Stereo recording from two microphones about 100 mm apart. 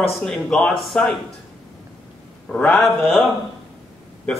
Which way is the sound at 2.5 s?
15° left (ahead or behind).